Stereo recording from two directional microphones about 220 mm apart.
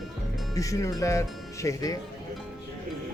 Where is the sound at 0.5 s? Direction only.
15° left (ahead or behind).